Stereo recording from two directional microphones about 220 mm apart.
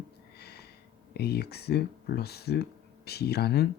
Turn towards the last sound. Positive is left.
turn(degrees=45)  # may be behind; listen again after turning